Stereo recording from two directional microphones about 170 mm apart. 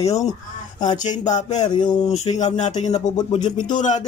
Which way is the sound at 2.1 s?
40° left (ahead or behind).